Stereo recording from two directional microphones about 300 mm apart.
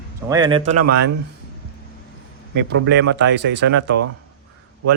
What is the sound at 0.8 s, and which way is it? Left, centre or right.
Speech, right.